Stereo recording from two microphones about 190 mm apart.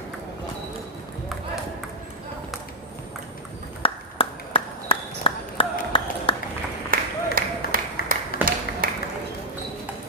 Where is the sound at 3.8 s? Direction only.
30° left (ahead or behind).